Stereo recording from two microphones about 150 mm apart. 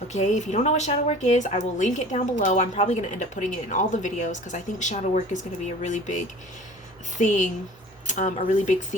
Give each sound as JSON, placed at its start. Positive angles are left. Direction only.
{"t": 0.1, "sound": "speech", "side_deg": 50}